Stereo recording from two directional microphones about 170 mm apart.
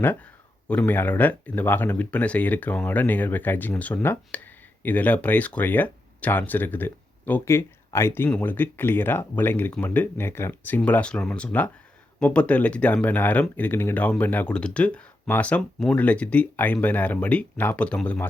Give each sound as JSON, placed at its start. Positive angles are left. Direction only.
{"t": 0.7, "sound": "speech", "side_deg": 10}